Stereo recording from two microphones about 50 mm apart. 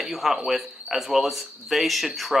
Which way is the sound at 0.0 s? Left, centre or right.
Centre.